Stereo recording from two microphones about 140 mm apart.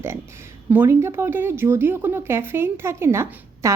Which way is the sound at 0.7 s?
15° right (ahead or behind).